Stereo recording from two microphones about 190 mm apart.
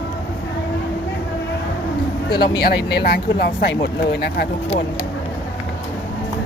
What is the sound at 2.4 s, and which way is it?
Speech, 55° left (ahead or behind).